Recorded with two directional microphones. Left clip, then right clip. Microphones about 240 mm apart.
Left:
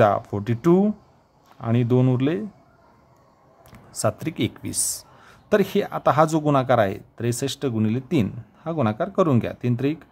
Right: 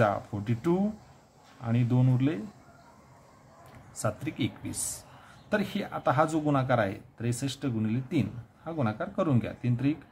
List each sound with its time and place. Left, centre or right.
0.0 s speech: left
4.0 s speech: left